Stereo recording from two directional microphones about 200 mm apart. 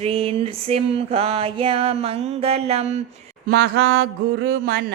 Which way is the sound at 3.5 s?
55° right (ahead or behind).